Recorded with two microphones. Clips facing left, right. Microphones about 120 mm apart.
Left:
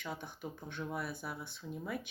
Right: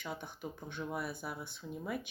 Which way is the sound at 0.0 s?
Centre (ahead or behind).